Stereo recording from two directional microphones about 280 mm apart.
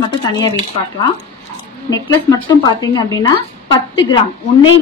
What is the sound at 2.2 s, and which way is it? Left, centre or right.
A woman's voice, centre.